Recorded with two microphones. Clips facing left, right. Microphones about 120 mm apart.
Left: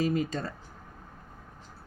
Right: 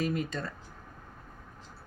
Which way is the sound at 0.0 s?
35° left (ahead or behind).